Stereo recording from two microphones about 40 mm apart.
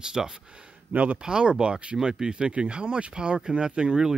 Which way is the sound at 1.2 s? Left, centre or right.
Right.